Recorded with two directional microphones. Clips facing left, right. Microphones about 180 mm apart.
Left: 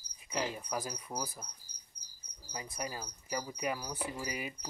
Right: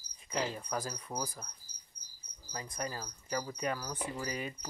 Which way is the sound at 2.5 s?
10° left (ahead or behind).